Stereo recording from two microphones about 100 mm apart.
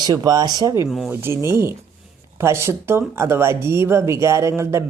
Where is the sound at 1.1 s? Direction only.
25° right (ahead or behind).